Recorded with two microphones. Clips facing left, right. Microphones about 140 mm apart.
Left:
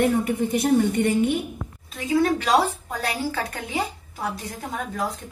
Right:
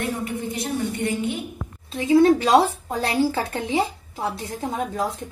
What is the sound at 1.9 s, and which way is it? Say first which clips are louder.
Speech: right 6 dB; 25° right (ahead or behind).